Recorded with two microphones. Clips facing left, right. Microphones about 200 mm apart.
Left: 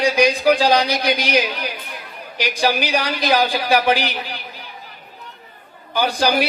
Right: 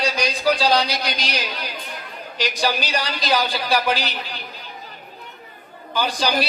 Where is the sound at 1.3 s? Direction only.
55° left (ahead or behind).